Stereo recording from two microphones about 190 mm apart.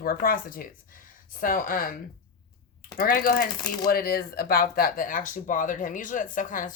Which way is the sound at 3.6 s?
20° left (ahead or behind).